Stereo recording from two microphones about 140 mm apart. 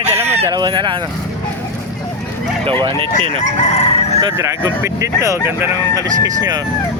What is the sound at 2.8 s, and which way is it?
Speech, 40° right (ahead or behind).